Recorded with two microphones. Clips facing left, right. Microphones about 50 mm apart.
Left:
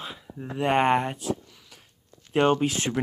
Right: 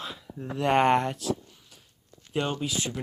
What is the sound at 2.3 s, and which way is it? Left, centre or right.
Speech, left.